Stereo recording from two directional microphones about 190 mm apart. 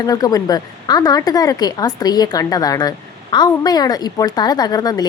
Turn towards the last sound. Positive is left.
turn(degrees=20)  # may be behind; listen again after turning